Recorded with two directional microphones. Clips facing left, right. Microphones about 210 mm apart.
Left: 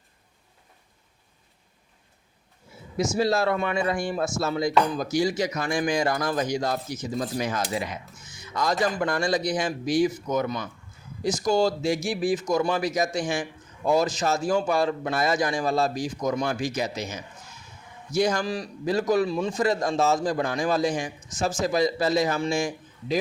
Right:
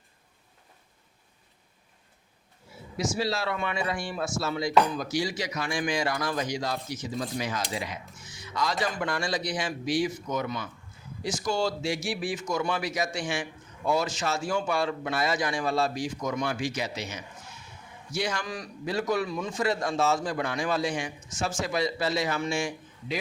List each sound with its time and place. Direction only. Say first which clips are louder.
3.2 s a man's voice: left 8 dB; 50° left (ahead or behind)